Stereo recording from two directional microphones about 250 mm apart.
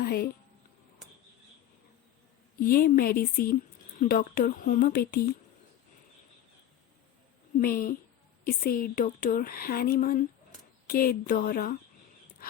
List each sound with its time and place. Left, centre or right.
0.0 s speech: left
2.6 s speech: left
7.5 s speech: left